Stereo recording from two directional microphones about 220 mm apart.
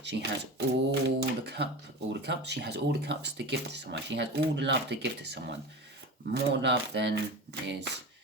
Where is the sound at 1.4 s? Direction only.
50° right (ahead or behind).